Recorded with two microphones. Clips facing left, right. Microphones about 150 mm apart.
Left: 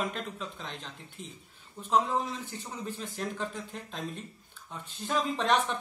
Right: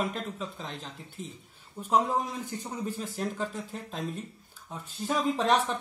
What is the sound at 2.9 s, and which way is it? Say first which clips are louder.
Speech: right 3 dB; 40° right (ahead or behind).